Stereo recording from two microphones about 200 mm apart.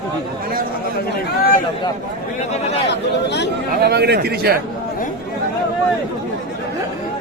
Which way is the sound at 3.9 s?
55° right (ahead or behind).